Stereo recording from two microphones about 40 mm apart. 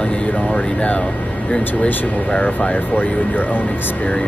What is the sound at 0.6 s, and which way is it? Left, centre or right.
Speech, left.